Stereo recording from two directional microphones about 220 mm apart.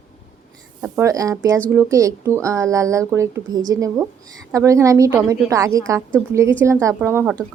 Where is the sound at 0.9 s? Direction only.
15° right (ahead or behind).